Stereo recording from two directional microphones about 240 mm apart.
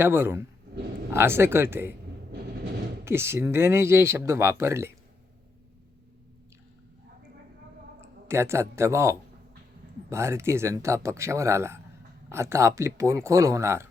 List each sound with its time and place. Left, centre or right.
0.0 s speech: centre
3.0 s speech: centre
8.3 s speech: centre